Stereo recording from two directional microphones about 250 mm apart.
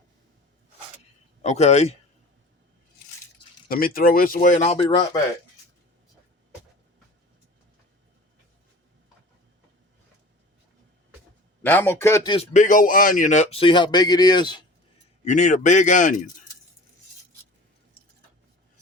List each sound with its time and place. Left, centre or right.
1.4 s a man's voice: left
3.7 s speech: left; by 5.2 s centre
11.6 s speech: centre
12.5 s a man's voice: left
15.2 s a man's voice: left